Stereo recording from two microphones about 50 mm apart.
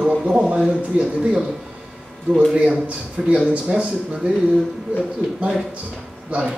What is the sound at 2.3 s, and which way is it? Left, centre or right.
Speech, right.